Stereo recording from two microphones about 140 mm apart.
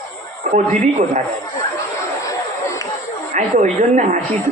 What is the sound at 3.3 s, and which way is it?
Speech, 60° right (ahead or behind).